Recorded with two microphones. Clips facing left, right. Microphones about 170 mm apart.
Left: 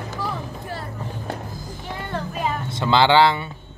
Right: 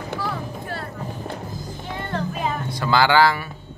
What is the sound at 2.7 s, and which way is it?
Speech, 25° left (ahead or behind).